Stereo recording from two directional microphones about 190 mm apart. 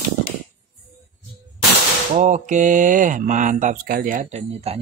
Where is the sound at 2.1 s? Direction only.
40° right (ahead or behind).